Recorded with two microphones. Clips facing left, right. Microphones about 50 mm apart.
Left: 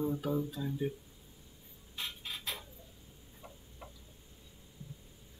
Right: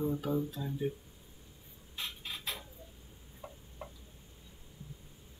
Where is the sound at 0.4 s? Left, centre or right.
Centre.